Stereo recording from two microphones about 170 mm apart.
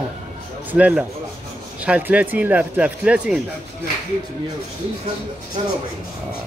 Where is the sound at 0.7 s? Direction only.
10° right (ahead or behind).